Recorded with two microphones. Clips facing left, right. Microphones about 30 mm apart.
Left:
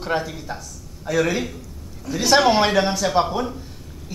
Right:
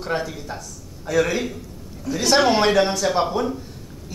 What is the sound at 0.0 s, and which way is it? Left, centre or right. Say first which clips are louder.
A woman's voice: left 1 dB; centre.